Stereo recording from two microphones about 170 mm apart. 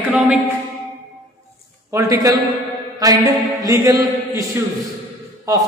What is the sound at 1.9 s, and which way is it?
Speech, 15° right (ahead or behind).